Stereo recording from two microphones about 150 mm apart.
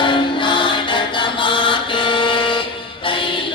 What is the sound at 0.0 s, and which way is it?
Chant, 30° left (ahead or behind).